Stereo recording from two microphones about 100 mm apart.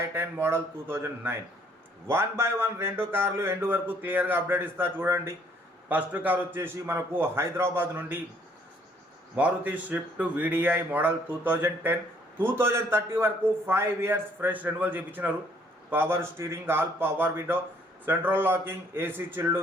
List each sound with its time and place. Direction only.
0.1 s speech: 25° right (ahead or behind)
9.3 s speech: 15° right (ahead or behind)